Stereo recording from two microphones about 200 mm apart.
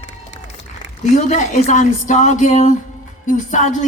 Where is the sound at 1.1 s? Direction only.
35° left (ahead or behind).